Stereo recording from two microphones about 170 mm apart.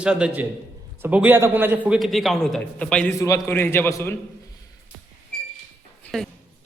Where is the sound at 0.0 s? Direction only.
5° right (ahead or behind).